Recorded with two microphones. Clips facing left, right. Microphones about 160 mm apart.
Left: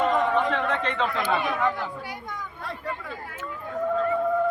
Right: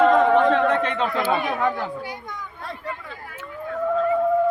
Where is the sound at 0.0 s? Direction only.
60° right (ahead or behind).